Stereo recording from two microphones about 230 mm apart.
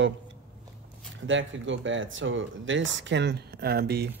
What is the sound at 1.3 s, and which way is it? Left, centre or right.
Speech, right.